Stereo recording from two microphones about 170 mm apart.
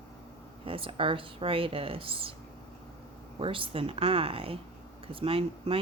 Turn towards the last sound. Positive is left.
turn(degrees=-35)  # may be behind; listen again after turning